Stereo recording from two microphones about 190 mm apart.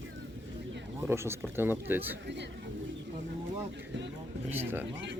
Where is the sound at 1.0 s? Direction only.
15° right (ahead or behind).